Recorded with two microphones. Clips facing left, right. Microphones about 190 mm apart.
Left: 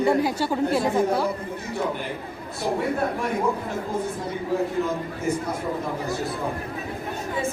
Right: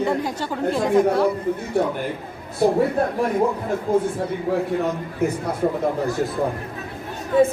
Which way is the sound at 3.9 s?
55° right (ahead or behind).